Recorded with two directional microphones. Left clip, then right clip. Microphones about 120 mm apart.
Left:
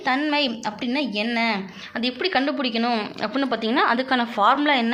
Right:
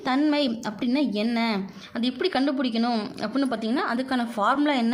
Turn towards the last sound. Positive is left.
turn(degrees=-45)  # may be behind; listen again after turning